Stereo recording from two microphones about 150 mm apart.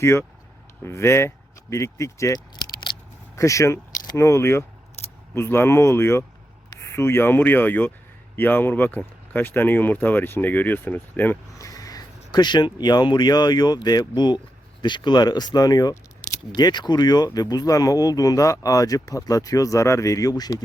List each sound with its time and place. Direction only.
0.0 s speech: 15° left (ahead or behind)